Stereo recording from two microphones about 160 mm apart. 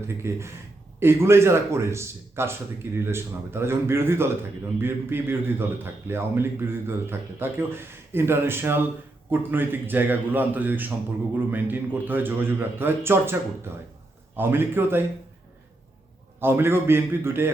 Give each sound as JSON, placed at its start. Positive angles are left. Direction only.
{"t": 0.1, "sound": "a man's voice", "side_deg": -15}
{"t": 14.3, "sound": "a man's voice", "side_deg": -15}
{"t": 16.4, "sound": "a man's voice", "side_deg": -15}